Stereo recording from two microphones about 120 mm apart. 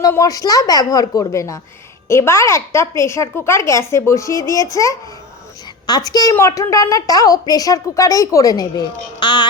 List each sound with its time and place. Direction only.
0.1 s a woman's voice: 30° left (ahead or behind)
6.1 s a woman's voice: 30° left (ahead or behind)